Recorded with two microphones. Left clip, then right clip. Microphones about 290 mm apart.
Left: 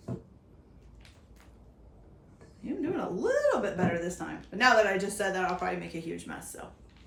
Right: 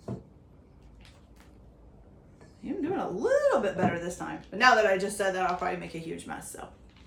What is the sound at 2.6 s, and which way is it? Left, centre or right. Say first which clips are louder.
Speech: right 1 dB; centre.